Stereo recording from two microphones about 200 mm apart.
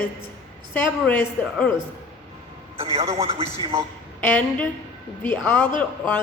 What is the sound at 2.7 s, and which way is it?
A man's voice, 30° right (ahead or behind).